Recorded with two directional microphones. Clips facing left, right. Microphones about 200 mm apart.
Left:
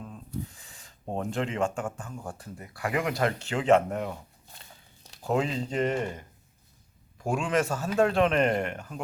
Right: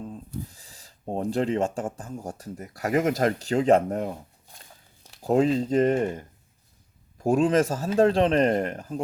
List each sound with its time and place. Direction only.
0.0 s speech: 30° right (ahead or behind)
5.2 s a man's voice: 40° right (ahead or behind)